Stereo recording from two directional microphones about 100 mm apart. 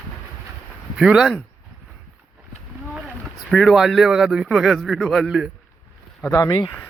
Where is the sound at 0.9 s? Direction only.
5° right (ahead or behind).